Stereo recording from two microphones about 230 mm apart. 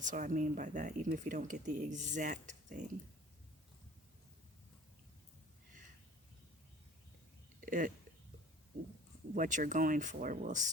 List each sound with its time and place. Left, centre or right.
0.0 s speech: right
7.6 s a sound: right
9.3 s speech: right